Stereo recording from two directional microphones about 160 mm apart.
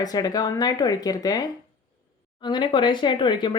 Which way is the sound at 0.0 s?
25° left (ahead or behind).